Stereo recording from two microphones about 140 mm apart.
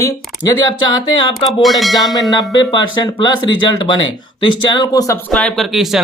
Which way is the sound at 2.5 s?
30° left (ahead or behind).